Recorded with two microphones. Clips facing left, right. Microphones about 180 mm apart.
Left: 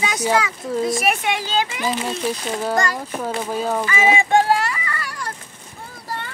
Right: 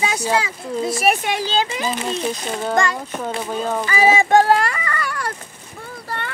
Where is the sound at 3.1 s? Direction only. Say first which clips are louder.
Even; 5° left (ahead or behind).